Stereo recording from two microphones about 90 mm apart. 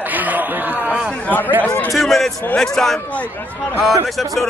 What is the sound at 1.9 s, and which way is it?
A man's voice, centre (ahead or behind).